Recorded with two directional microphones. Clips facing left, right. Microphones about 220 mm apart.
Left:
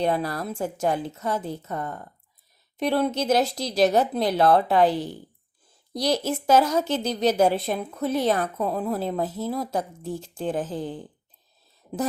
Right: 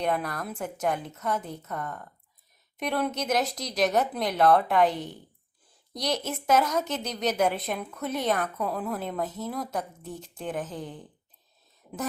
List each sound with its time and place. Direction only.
0.0 s a woman's voice: 30° left (ahead or behind)